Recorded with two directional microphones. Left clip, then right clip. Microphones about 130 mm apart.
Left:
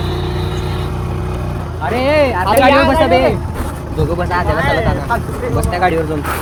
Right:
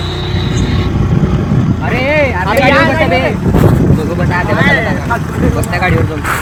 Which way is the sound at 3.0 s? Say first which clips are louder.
Left 1 dB; 45° left (ahead or behind).